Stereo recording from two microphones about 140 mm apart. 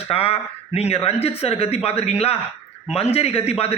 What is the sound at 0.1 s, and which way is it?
A man's voice, 45° left (ahead or behind).